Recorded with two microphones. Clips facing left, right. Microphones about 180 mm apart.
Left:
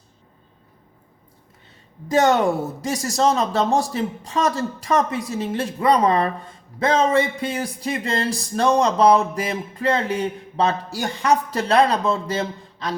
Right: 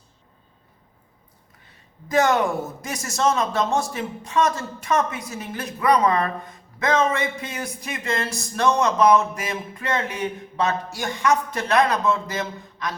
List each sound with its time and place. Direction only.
2.0 s a man's voice: 30° left (ahead or behind)